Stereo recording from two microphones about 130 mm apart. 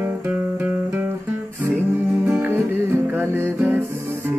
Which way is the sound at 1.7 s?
20° right (ahead or behind).